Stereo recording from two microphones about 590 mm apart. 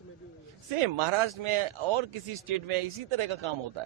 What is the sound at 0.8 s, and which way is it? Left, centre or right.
A man's voice, right.